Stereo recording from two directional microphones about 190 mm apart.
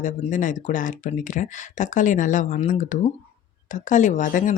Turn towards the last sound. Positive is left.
turn(degrees=40)  # may be behind; listen again after turning